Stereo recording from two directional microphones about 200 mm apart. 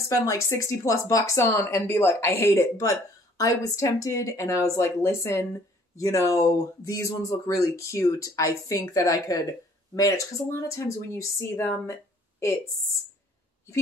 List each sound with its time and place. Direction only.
0.1 s speech: 15° left (ahead or behind)